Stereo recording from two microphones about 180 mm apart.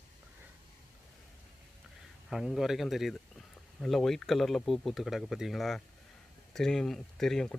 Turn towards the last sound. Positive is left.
turn(degrees=0)  # may be behind; listen again after turning